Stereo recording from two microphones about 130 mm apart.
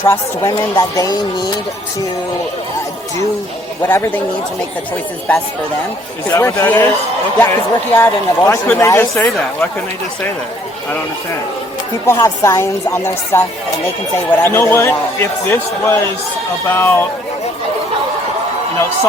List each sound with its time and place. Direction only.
0.0 s speech: 20° left (ahead or behind)
3.8 s speech: 20° left (ahead or behind)
6.3 s speech: 20° left (ahead or behind)
12.1 s speech: 25° left (ahead or behind)